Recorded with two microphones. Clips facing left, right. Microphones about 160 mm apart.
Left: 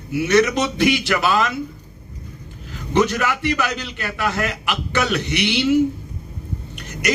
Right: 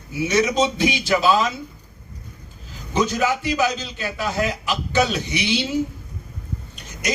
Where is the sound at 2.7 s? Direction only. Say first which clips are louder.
Left 3 dB; 65° left (ahead or behind).